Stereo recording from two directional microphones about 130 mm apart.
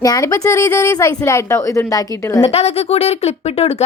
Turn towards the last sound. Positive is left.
turn(degrees=55)  # may be behind; listen again after turning